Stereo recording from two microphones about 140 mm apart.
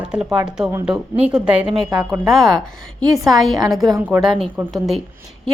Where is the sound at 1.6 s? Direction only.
35° right (ahead or behind).